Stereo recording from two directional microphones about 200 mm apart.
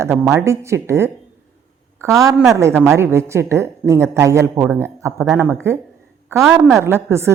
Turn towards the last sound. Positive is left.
turn(degrees=-10)  # may be behind; listen again after turning